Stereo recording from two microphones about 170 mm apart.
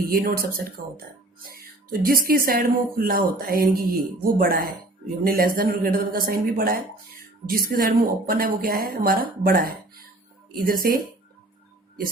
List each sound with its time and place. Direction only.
0.0 s speech: 55° right (ahead or behind)
2.0 s speech: 60° right (ahead or behind)